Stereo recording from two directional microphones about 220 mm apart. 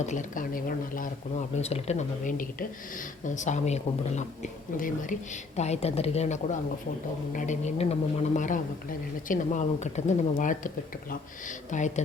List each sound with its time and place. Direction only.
0.0 s speech: 35° left (ahead or behind)